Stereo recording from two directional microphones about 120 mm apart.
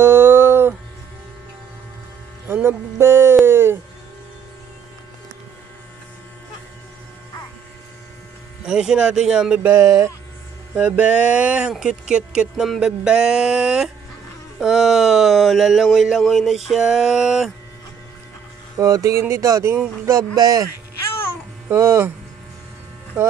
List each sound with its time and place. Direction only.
0.0 s music: 20° right (ahead or behind)
2.4 s speech: 20° right (ahead or behind)
3.4 s a sound: 20° right (ahead or behind)
8.6 s speech: 5° right (ahead or behind)
9.7 s speech: 25° right (ahead or behind)
10.7 s speech: 10° right (ahead or behind)
18.8 s speech: 30° right (ahead or behind)